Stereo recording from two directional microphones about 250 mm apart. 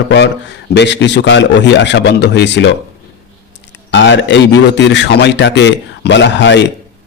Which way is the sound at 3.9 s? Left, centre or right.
Left.